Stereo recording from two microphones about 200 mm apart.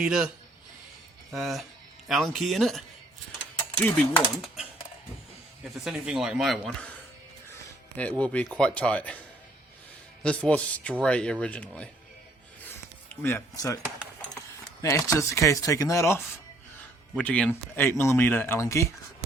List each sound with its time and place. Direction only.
0.0 s speech: 5° right (ahead or behind)
1.3 s speech: centre (ahead or behind)
5.8 s speech: centre (ahead or behind)
8.2 s speech: 5° left (ahead or behind)
10.2 s speech: 5° left (ahead or behind)
13.2 s speech: 15° left (ahead or behind)